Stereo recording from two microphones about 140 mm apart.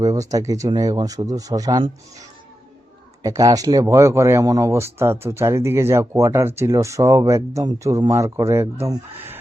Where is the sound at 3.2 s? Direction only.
25° right (ahead or behind).